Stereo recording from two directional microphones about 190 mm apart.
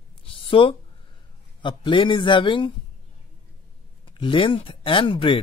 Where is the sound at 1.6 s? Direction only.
25° left (ahead or behind).